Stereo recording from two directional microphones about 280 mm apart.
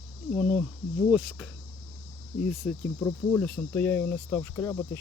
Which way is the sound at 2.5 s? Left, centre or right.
Centre.